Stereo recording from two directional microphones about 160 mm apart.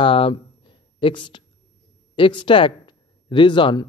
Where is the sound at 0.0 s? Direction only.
35° left (ahead or behind).